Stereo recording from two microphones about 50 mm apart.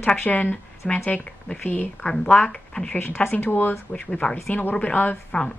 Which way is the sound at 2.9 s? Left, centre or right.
Left.